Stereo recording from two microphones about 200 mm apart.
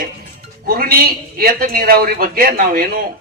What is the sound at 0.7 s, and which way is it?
A man's voice, 45° right (ahead or behind).